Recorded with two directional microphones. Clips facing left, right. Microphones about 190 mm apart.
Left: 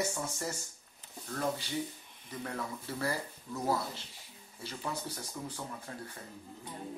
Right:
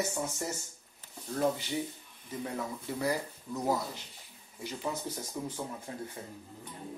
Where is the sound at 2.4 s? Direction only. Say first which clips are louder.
Right 2 dB; 15° right (ahead or behind).